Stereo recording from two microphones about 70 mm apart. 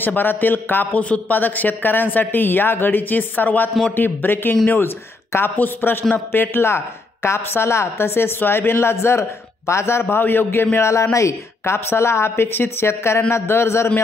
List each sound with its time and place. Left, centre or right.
0.0 s a man's voice: left